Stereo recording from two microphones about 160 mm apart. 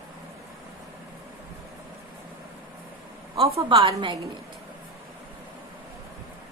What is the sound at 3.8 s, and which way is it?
Speech, 30° right (ahead or behind).